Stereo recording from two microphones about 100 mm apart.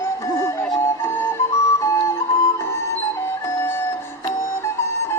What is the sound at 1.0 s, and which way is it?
Flute, 25° left (ahead or behind).